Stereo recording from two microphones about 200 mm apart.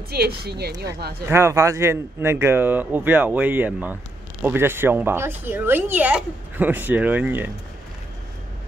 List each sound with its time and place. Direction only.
0.1 s speech: 50° right (ahead or behind)
1.3 s speech: 15° right (ahead or behind)